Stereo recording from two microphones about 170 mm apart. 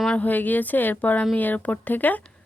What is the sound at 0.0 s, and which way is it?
A woman's voice, 5° left (ahead or behind).